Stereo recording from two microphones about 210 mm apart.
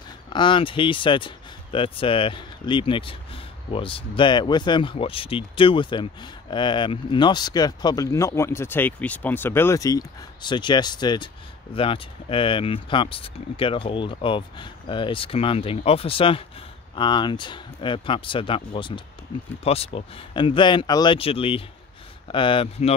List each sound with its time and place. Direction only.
0.3 s speech: 25° left (ahead or behind)